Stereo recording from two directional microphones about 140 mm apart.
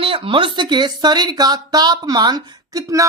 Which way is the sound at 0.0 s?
40° right (ahead or behind).